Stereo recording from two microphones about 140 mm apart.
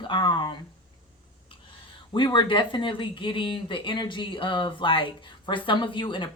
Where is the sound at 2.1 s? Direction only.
35° left (ahead or behind).